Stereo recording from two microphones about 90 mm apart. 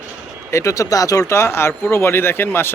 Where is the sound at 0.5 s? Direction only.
35° left (ahead or behind).